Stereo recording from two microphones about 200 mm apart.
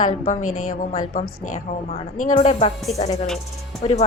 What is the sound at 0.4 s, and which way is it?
Speech, 90° left.